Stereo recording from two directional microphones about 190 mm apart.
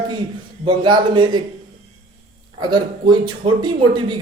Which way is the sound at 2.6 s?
25° right (ahead or behind).